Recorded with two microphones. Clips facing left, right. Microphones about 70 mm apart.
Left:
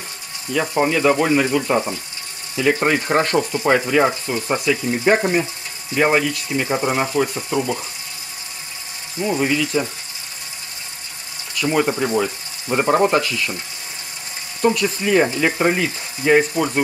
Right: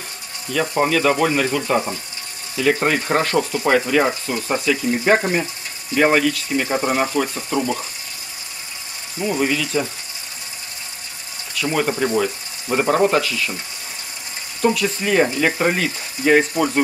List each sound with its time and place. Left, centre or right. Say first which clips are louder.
0.5 s speech: even; centre
9.2 s speech: left 1 dB; centre
11.6 s speech: left 1 dB; centre
14.6 s speech: left 1 dB; centre